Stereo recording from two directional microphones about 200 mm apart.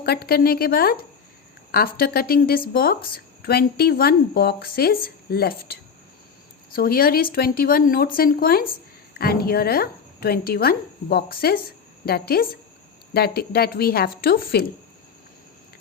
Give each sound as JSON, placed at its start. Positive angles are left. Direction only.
{"t": 0.0, "sound": "speech", "side_deg": 50}
{"t": 6.7, "sound": "speech", "side_deg": 50}